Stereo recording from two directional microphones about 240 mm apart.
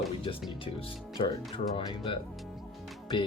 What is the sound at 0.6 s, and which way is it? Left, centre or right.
Speech, left.